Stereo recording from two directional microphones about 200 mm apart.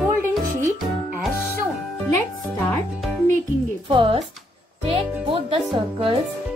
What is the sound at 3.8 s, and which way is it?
Speech, 25° right (ahead or behind).